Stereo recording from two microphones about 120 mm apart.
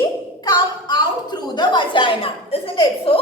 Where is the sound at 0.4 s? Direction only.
35° left (ahead or behind).